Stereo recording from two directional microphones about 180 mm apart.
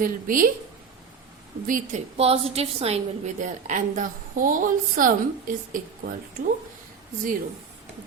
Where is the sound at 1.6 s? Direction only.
45° right (ahead or behind).